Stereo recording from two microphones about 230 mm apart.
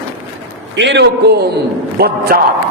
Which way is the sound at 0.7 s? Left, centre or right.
Right.